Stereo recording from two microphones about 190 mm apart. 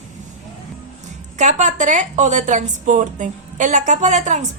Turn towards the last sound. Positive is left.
turn(degrees=-40)  # may be behind; listen again after turning